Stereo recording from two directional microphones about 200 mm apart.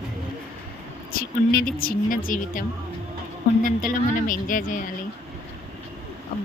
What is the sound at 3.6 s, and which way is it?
A woman's voice, 45° left (ahead or behind).